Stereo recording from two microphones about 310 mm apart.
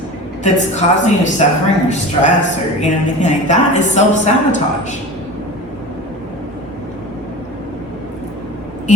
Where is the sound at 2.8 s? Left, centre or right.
Left.